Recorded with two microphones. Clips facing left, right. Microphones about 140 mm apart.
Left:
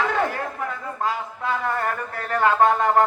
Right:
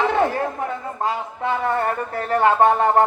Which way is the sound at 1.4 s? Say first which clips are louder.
Right 4 dB; 25° right (ahead or behind).